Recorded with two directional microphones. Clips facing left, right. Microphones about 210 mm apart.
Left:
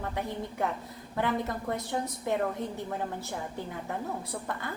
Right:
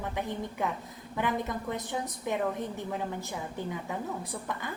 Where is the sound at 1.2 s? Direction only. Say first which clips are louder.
Left 1 dB; 15° right (ahead or behind).